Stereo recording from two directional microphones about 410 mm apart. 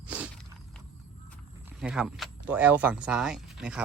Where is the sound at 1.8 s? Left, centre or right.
Centre.